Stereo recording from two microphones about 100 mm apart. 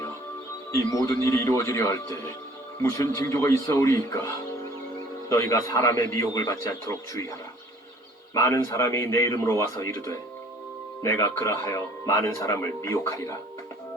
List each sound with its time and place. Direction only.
0.7 s speech: 30° left (ahead or behind)
5.3 s speech: 30° left (ahead or behind)